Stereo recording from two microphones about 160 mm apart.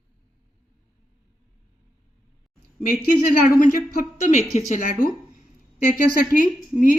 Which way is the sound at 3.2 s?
65° left (ahead or behind).